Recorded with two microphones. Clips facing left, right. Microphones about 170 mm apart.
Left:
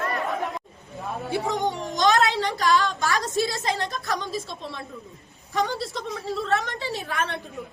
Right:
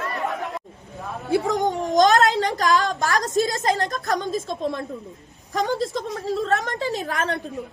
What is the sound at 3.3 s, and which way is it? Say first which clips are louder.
A woman's voice: right 4 dB; 40° right (ahead or behind).